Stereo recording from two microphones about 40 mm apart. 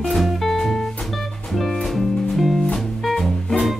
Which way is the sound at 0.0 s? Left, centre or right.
Centre.